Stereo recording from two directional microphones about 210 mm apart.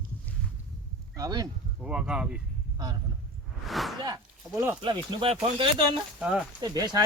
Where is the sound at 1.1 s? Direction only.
20° right (ahead or behind).